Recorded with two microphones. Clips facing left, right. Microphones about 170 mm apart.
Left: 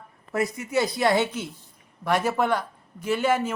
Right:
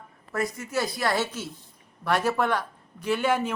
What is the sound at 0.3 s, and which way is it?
A woman's voice, 20° left (ahead or behind).